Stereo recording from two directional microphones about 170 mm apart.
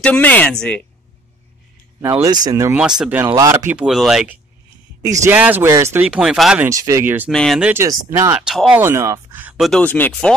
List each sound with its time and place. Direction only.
0.0 s speech: 10° left (ahead or behind)
2.2 s speech: 20° right (ahead or behind)
3.0 s speech: 10° right (ahead or behind)
5.0 s speech: 20° right (ahead or behind)
6.0 s speech: 5° right (ahead or behind)
6.6 s speech: 20° right (ahead or behind)
7.2 s speech: centre (ahead or behind)
7.7 s speech: 15° right (ahead or behind)
8.4 s speech: 5° right (ahead or behind)